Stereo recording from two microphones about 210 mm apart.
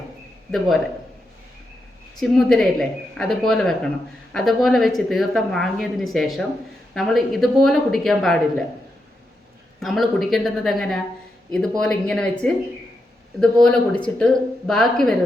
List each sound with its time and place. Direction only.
2.1 s speech: centre (ahead or behind)
9.8 s speech: centre (ahead or behind)